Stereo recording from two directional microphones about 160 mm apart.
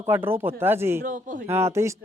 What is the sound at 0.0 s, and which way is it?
Speech, 15° right (ahead or behind).